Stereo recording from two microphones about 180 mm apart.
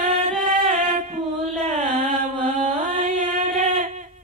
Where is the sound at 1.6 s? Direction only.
40° right (ahead or behind).